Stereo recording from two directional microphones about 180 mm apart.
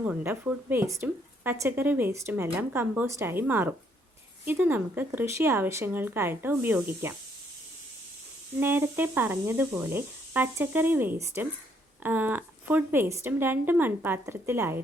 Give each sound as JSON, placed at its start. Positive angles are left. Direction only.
{"t": 0.0, "sound": "speech", "side_deg": -10}
{"t": 8.5, "sound": "speech", "side_deg": -10}